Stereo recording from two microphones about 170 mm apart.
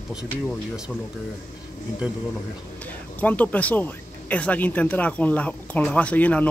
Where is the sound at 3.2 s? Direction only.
10° left (ahead or behind).